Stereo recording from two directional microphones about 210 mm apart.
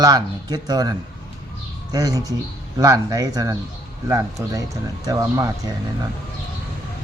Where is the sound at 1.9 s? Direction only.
20° right (ahead or behind).